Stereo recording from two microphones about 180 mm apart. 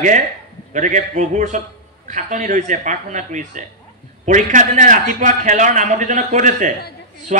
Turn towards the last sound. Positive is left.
turn(degrees=-45)  # may be behind; listen again after turning